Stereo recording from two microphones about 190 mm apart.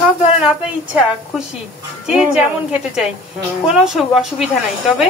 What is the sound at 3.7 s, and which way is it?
Speech, centre (ahead or behind).